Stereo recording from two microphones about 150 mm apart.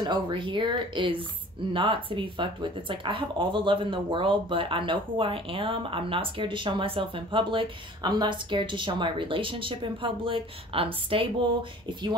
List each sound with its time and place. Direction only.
0.0 s speech: 30° right (ahead or behind)